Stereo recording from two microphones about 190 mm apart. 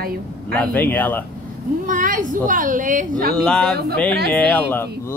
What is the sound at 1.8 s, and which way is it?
A woman's voice, 45° right (ahead or behind).